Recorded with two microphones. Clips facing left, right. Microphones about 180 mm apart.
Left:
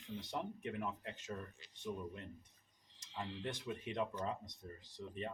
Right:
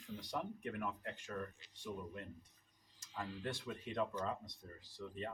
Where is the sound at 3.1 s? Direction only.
25° left (ahead or behind).